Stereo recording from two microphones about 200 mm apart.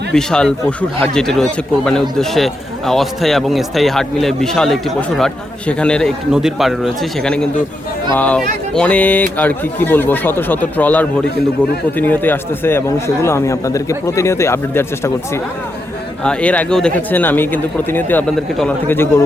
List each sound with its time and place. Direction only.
0.1 s speech: 5° left (ahead or behind)